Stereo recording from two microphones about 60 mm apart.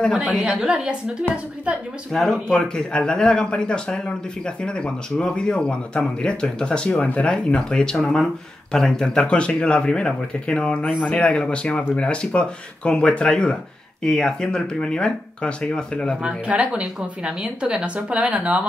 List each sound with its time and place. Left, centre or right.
0.1 s a woman's voice: right
0.6 s a woman's voice: centre
2.1 s speech: centre
16.2 s a woman's voice: centre